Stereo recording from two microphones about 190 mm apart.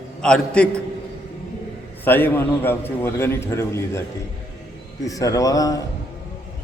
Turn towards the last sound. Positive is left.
turn(degrees=20)  # may be behind; listen again after turning